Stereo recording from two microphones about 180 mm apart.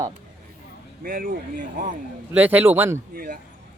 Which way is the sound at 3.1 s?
50° right (ahead or behind).